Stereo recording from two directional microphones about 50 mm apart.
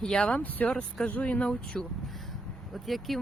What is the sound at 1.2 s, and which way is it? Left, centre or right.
Speech, left.